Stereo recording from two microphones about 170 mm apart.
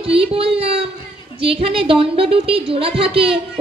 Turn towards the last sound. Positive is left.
turn(degrees=-35)  # may be behind; listen again after turning